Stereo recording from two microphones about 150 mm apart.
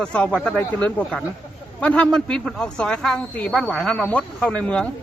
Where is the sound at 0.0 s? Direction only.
5° left (ahead or behind).